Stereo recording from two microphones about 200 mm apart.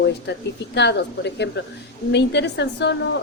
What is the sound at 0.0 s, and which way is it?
A woman's voice, 60° left (ahead or behind).